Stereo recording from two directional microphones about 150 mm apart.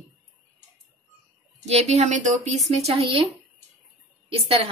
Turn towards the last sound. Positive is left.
turn(degrees=-40)  # may be behind; listen again after turning